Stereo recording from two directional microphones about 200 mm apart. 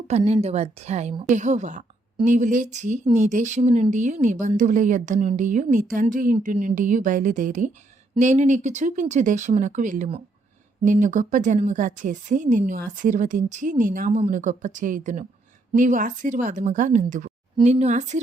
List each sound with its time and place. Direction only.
0.1 s a woman's voice: 30° right (ahead or behind)